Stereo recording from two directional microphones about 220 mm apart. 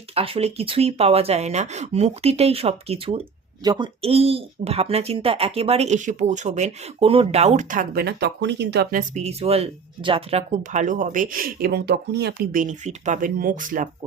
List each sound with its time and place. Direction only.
0.1 s speech: 25° right (ahead or behind)